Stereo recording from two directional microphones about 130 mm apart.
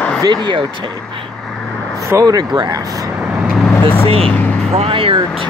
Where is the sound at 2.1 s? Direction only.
30° right (ahead or behind).